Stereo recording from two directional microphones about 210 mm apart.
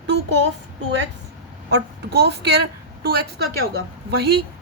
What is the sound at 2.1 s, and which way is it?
Speech, 50° right (ahead or behind).